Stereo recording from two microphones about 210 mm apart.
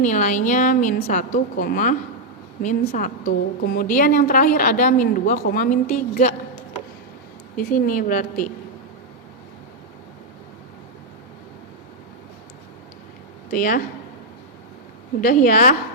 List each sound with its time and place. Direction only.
0.0 s a woman's voice: 35° left (ahead or behind)
7.5 s a woman's voice: 40° left (ahead or behind)
13.5 s a woman's voice: 40° left (ahead or behind)
15.2 s a woman's voice: 40° left (ahead or behind)